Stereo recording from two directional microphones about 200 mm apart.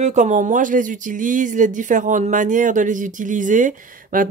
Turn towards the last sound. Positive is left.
turn(degrees=-40)  # may be behind; listen again after turning